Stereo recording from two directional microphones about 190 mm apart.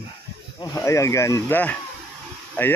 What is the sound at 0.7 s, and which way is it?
Speech, 15° left (ahead or behind).